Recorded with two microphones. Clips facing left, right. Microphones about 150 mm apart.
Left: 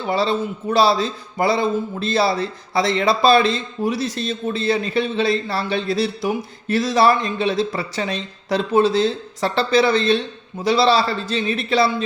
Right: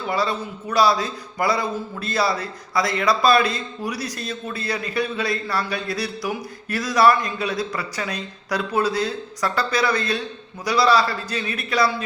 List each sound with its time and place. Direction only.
0.0 s speech: 25° left (ahead or behind)